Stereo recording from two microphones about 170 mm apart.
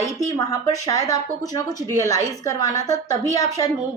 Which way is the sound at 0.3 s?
20° left (ahead or behind).